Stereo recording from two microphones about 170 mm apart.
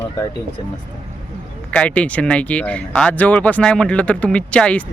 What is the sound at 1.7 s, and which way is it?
Speech, 5° left (ahead or behind).